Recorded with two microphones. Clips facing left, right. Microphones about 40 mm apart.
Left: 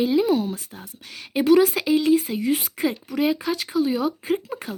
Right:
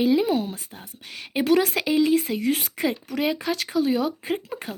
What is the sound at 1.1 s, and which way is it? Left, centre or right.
Speech, right.